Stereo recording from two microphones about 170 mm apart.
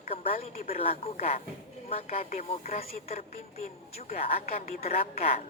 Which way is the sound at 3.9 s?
40° left (ahead or behind).